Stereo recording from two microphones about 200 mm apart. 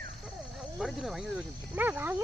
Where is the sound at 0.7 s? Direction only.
Centre (ahead or behind).